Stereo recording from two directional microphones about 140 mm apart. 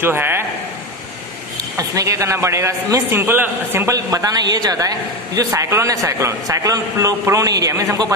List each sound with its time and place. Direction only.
0.0 s a man's voice: 15° right (ahead or behind)
1.8 s a man's voice: 25° right (ahead or behind)